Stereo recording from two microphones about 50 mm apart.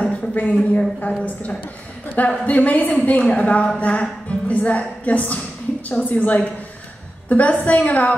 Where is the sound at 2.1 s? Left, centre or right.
Left.